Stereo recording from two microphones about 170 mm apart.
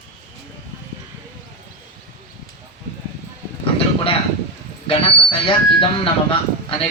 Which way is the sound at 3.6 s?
35° left (ahead or behind).